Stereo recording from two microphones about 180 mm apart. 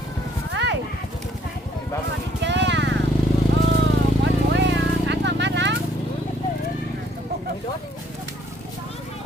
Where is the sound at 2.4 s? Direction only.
80° right.